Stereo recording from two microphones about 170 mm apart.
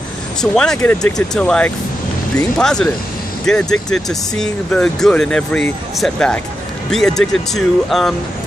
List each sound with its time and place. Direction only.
0.4 s speech: 5° left (ahead or behind)